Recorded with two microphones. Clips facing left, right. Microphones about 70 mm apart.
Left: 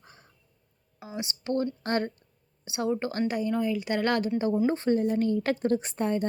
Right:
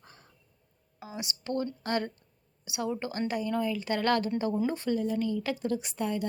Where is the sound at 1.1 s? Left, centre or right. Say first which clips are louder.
Left 4 dB; left.